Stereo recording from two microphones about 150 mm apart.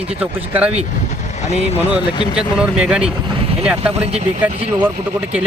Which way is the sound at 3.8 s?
45° right (ahead or behind).